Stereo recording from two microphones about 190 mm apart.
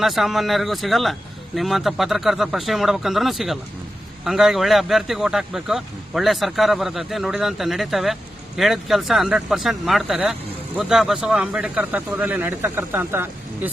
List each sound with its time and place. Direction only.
0.0 s speech: centre (ahead or behind)